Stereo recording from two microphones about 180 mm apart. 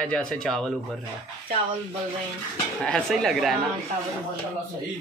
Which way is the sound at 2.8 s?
5° left (ahead or behind).